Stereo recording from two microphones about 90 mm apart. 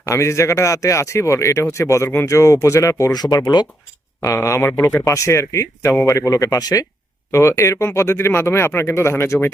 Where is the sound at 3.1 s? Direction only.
50° left (ahead or behind).